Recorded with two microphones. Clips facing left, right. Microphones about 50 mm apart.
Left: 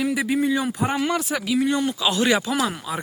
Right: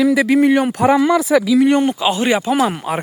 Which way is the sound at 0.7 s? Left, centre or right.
Right.